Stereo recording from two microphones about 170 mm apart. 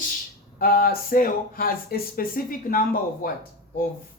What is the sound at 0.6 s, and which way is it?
Speech, 60° left (ahead or behind).